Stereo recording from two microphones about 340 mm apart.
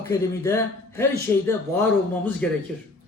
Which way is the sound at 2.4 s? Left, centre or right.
Centre.